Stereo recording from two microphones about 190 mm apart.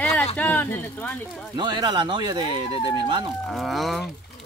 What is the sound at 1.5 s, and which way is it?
Speech, 25° right (ahead or behind).